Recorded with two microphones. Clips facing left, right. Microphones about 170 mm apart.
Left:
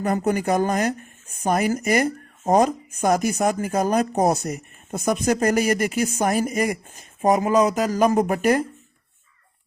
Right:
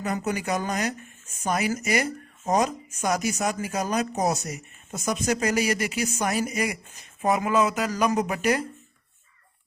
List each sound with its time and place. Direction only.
0.0 s speech: 50° left (ahead or behind)